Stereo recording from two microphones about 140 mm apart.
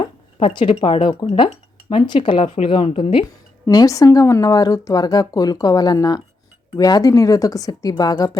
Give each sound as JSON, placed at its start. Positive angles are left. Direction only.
{"t": 0.0, "sound": "speech", "side_deg": 40}
{"t": 3.7, "sound": "speech", "side_deg": 25}